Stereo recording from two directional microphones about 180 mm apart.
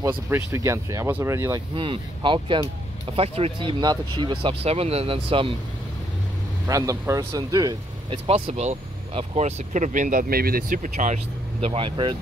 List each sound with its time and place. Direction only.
0.3 s speech: 15° right (ahead or behind)
6.7 s speech: 20° right (ahead or behind)
8.3 s speech: 35° right (ahead or behind)
11.6 s speech: 30° right (ahead or behind)